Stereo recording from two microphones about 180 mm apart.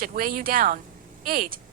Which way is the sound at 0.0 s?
50° right (ahead or behind).